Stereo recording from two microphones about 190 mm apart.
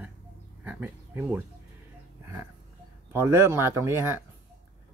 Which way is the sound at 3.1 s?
10° right (ahead or behind).